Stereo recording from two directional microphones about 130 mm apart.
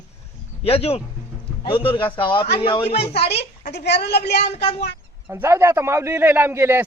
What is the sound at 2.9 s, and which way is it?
Speech, 50° left (ahead or behind).